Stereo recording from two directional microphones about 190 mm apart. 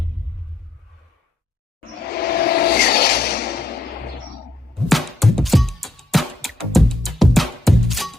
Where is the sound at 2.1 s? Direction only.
55° left (ahead or behind).